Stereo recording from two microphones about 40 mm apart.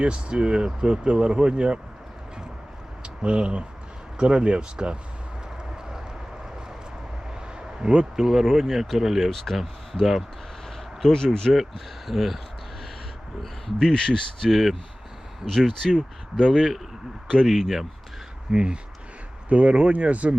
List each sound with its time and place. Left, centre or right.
0.0 s speech: right
3.0 s a sound: right
4.2 s speech: right
7.8 s speech: centre
9.3 s speech: centre
11.5 s speech: centre
13.4 s speech: centre
15.4 s speech: centre
16.6 s speech: centre
18.5 s speech: right